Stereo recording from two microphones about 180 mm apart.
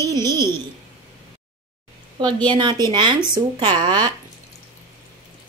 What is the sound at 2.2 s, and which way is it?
Speech, 25° right (ahead or behind).